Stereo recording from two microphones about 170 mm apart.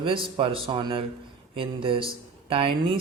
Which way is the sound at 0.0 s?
30° right (ahead or behind).